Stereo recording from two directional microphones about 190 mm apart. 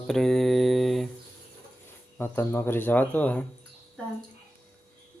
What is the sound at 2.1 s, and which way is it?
Speech, 10° left (ahead or behind).